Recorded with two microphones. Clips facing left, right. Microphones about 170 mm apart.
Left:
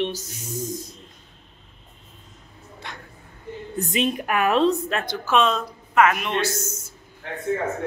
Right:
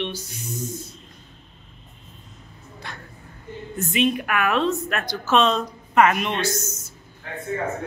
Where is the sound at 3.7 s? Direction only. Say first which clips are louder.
Right 2 dB; 40° left (ahead or behind).